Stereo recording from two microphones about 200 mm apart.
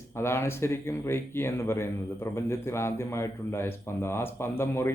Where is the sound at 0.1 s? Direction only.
10° left (ahead or behind).